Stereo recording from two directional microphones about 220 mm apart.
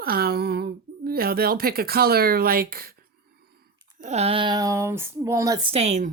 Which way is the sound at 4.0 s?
30° right (ahead or behind).